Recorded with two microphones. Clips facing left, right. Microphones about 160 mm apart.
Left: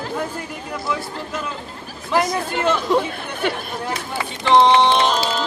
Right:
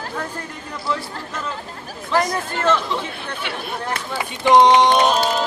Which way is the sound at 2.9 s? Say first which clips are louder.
Left 8 dB; 45° left (ahead or behind).